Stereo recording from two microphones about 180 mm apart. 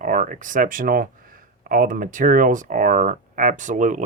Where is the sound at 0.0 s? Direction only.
45° right (ahead or behind).